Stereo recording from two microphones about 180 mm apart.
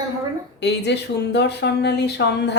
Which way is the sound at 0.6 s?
70° left (ahead or behind).